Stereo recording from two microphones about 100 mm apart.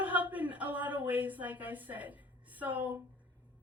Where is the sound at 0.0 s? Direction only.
15° right (ahead or behind).